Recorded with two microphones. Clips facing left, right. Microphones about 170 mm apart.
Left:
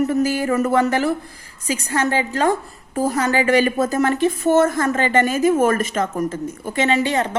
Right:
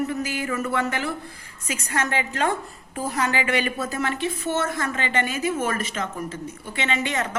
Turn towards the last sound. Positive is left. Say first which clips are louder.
# left 7 dB
turn(degrees=35)  # may be behind; listen again after turning